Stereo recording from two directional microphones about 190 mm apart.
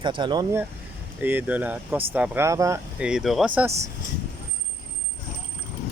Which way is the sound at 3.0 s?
5° right (ahead or behind).